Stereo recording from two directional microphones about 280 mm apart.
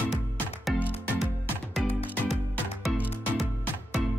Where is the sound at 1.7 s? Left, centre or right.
Centre.